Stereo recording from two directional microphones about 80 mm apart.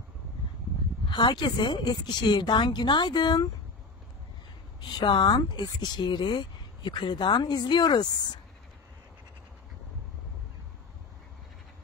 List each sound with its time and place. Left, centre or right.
1.0 s speech: left
4.8 s speech: left